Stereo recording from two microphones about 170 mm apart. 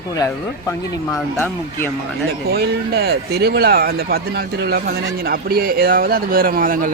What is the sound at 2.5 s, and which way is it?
Speech, 70° right (ahead or behind).